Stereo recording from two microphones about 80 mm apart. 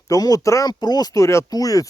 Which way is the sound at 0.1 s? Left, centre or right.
Left.